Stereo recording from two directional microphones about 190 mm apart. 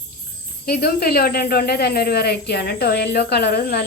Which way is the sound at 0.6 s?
55° left (ahead or behind).